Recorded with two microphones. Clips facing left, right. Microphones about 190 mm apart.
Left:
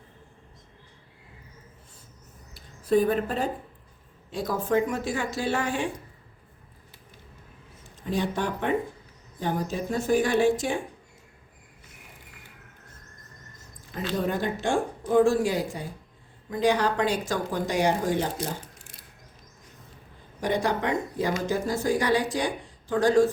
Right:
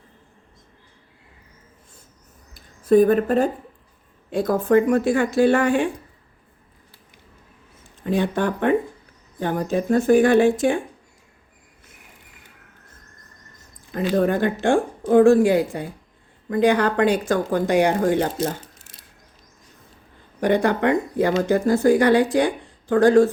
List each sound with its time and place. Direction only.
2.9 s speech: 50° right (ahead or behind)
8.0 s speech: 60° right (ahead or behind)
14.2 s speech: 55° right (ahead or behind)
20.4 s speech: 60° right (ahead or behind)